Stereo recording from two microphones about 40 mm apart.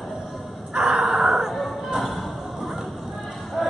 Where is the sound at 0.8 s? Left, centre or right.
Centre.